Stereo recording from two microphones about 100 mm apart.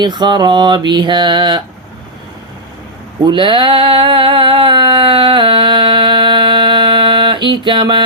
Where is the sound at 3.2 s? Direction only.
55° right (ahead or behind).